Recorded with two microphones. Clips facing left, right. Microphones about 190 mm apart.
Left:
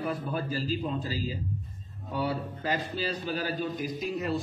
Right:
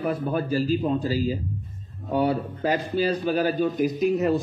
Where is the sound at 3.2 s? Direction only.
45° right (ahead or behind).